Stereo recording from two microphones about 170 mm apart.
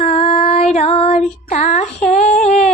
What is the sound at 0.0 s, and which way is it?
Child singing, 35° left (ahead or behind).